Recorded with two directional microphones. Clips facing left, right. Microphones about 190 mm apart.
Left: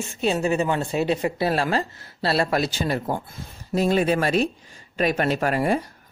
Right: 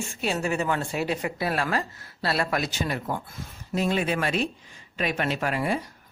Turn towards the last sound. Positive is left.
turn(degrees=45)  # may be behind; listen again after turning